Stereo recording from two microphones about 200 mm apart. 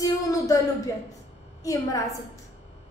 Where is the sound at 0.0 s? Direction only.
15° left (ahead or behind).